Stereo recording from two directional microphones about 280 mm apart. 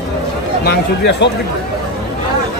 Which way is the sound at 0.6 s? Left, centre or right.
Left.